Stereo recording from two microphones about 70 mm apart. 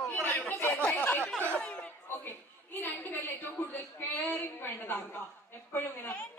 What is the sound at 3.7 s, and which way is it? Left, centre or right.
A woman's voice, left.